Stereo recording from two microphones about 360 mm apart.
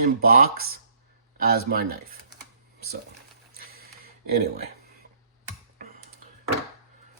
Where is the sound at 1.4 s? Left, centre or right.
Right.